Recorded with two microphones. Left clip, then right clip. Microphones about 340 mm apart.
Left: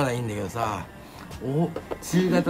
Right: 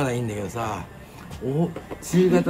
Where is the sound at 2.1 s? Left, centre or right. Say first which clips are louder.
Right 4 dB; centre.